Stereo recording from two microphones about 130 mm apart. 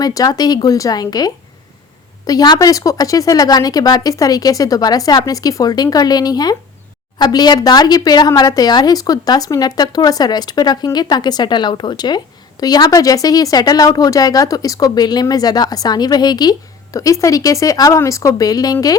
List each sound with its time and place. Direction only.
0.0 s speech: 30° left (ahead or behind)